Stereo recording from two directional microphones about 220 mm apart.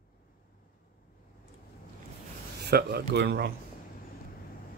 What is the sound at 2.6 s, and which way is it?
Speech, 45° right (ahead or behind).